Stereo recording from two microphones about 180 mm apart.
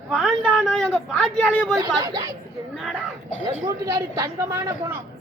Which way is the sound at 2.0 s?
20° right (ahead or behind).